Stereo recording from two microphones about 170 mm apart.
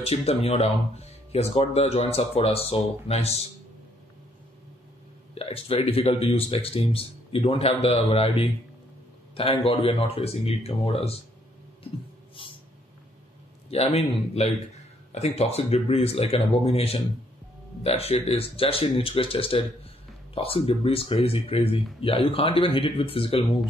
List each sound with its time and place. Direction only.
0.0 s speech: 35° left (ahead or behind)
5.3 s a man's voice: 35° left (ahead or behind)
13.7 s speech: 40° left (ahead or behind)